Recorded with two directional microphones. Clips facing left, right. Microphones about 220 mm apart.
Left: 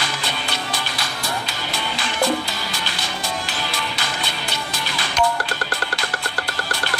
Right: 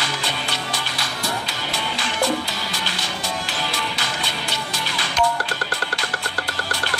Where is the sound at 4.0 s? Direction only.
55° left (ahead or behind).